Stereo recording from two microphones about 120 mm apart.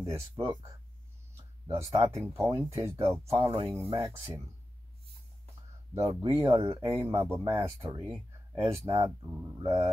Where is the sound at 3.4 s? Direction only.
50° right (ahead or behind).